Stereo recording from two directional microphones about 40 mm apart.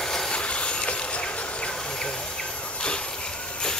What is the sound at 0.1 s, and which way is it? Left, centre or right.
Vehicle, left.